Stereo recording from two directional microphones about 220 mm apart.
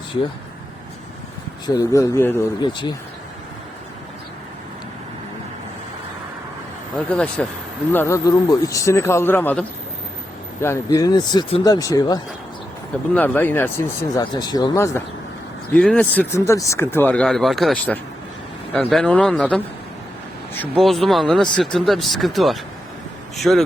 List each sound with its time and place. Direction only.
1.6 s speech: 15° left (ahead or behind)
6.9 s speech: 5° left (ahead or behind)
15.7 s speech: 5° left (ahead or behind)
20.8 s speech: centre (ahead or behind)